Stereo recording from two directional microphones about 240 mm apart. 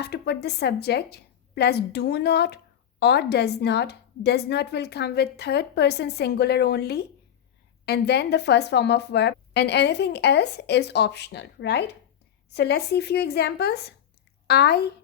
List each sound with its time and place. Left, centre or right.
0.0 s a woman's voice: left